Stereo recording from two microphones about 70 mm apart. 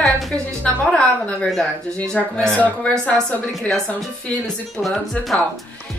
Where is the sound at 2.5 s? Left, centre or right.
Centre.